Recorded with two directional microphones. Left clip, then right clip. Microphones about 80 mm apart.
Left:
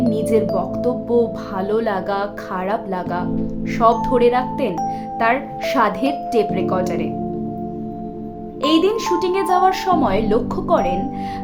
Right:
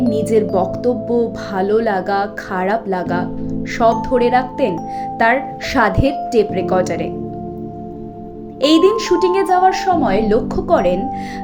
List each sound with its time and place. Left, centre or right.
0.1 s speech: right
2.5 s speech: right
3.8 s speech: right
4.2 s speech: right
6.0 s speech: centre
6.7 s speech: right
8.6 s a woman's voice: right
8.9 s speech: right
9.4 s speech: centre
10.0 s speech: centre
10.8 s speech: right